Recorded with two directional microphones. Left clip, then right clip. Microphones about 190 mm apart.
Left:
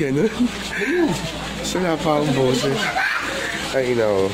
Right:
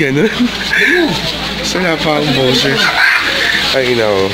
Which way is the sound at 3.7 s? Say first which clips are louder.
Right 7 dB; centre (ahead or behind).